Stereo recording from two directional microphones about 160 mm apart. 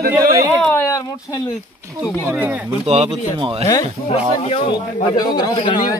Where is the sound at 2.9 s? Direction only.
40° right (ahead or behind).